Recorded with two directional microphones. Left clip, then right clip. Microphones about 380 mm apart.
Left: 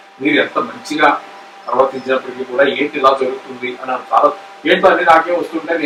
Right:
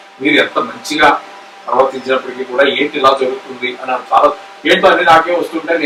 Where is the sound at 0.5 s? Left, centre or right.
Centre.